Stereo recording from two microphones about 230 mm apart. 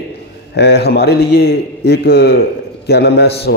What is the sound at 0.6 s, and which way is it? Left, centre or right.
A man's voice, left.